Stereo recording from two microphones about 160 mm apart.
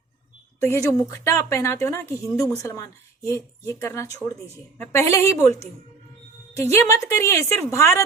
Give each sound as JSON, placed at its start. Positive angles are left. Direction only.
{"t": 0.6, "sound": "a woman's voice", "side_deg": 15}